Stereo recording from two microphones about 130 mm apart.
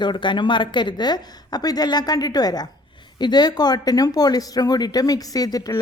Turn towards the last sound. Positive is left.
turn(degrees=30)  # may be behind; listen again after turning